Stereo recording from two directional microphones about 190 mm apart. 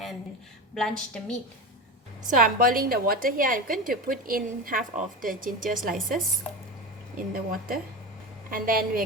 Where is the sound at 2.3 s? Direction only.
45° right (ahead or behind).